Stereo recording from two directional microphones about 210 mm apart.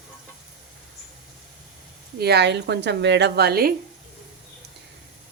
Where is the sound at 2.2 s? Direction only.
50° right (ahead or behind).